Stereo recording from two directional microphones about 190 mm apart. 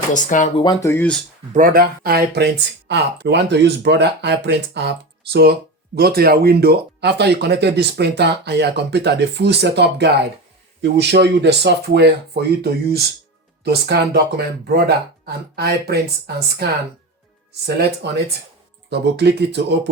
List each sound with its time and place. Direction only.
0.1 s speech: 40° left (ahead or behind)
0.5 s speech: 25° left (ahead or behind)
1.5 s speech: 50° right (ahead or behind)
18.0 s speech: 60° right (ahead or behind)